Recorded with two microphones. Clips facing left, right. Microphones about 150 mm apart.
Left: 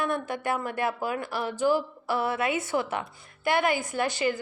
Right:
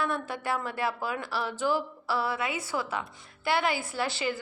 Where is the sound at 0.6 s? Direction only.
50° left (ahead or behind).